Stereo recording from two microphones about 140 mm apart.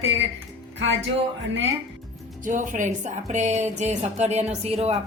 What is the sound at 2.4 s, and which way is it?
Speech, 65° right (ahead or behind).